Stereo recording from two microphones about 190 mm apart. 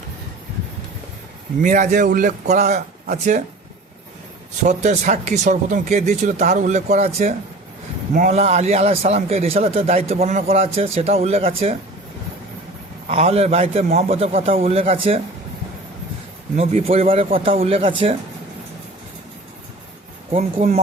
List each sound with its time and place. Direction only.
1.6 s a man's voice: 40° right (ahead or behind)
4.6 s a man's voice: 40° right (ahead or behind)
13.1 s a man's voice: 30° right (ahead or behind)
16.6 s a man's voice: 30° right (ahead or behind)
20.3 s a man's voice: 40° right (ahead or behind)